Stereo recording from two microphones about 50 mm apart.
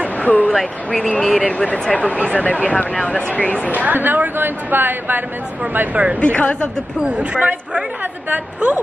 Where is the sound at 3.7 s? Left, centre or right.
Right.